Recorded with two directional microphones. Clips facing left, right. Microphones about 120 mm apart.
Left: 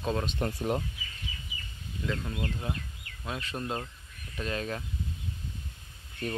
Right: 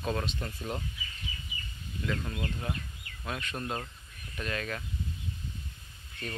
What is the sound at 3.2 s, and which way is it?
Speech, 20° left (ahead or behind).